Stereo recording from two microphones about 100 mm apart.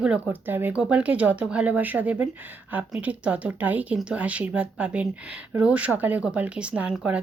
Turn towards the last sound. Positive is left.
turn(degrees=-10)  # may be behind; listen again after turning